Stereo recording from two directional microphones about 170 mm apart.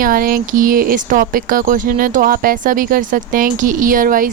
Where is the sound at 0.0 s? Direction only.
55° right (ahead or behind).